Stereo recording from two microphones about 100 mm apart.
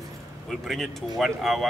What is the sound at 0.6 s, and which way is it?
Speech, centre (ahead or behind).